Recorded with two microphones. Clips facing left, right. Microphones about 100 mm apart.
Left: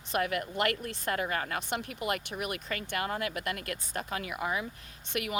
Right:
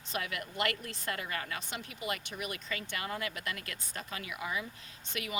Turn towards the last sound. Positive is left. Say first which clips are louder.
# left 5 dB
turn(degrees=60)  # may be behind; listen again after turning